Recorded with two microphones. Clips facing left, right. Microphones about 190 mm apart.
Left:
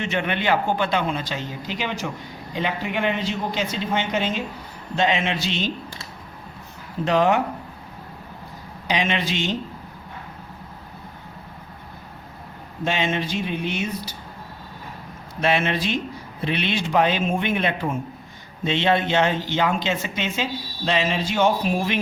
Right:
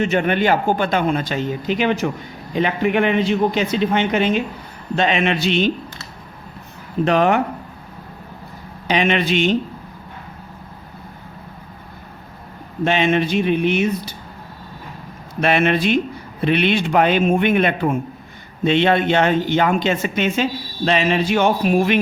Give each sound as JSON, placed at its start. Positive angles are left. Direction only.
{"t": 0.0, "sound": "a man's voice", "side_deg": -45}
{"t": 7.0, "sound": "speech", "side_deg": -60}
{"t": 8.9, "sound": "speech", "side_deg": -60}
{"t": 12.8, "sound": "speech", "side_deg": -65}
{"t": 15.4, "sound": "speech", "side_deg": -60}